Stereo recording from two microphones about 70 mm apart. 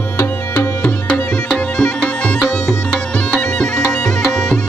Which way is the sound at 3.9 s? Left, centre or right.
Centre.